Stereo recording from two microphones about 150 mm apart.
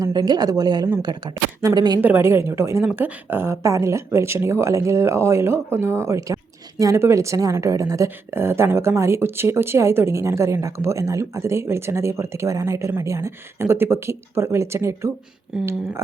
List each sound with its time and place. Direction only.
0.0 s a woman's voice: 25° right (ahead or behind)
2.0 s a woman's voice: 15° right (ahead or behind)
15.5 s speech: 5° right (ahead or behind)